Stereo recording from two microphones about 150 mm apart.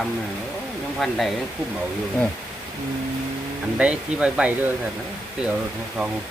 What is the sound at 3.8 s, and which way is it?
Speech, 5° right (ahead or behind).